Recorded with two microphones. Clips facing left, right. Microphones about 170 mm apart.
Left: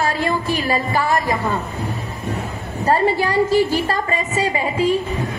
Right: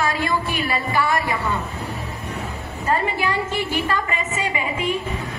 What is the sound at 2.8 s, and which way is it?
A woman's voice, 35° left (ahead or behind).